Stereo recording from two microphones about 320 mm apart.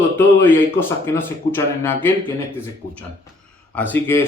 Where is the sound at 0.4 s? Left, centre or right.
Centre.